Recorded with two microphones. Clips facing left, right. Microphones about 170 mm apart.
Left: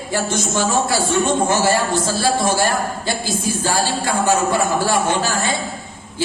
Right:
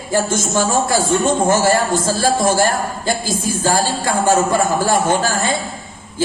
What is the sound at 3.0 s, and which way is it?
Speech, 45° right (ahead or behind).